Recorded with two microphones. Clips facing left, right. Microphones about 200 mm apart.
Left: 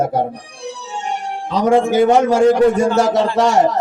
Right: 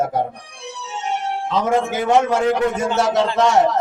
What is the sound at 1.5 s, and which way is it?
A man's voice, 35° left (ahead or behind).